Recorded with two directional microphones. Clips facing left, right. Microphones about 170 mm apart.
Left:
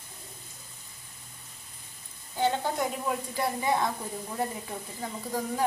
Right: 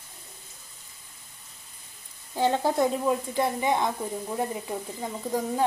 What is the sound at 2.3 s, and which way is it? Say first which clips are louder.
Speech: right 3 dB; 35° right (ahead or behind).